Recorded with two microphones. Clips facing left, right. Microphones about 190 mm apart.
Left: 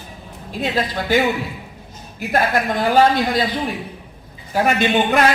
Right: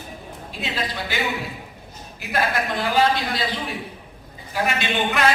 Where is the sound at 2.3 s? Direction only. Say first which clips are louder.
Left 5 dB; 50° left (ahead or behind).